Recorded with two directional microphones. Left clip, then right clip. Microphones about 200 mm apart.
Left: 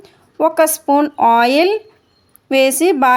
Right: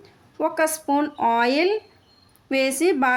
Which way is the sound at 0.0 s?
35° left (ahead or behind).